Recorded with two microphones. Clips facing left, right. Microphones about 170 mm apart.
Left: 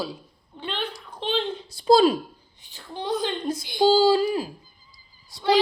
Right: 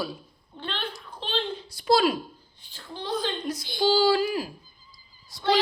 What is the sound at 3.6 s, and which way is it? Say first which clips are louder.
Speech: left 4 dB; 20° left (ahead or behind).